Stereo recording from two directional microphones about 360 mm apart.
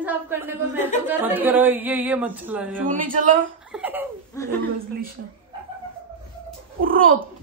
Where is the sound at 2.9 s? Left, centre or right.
Right.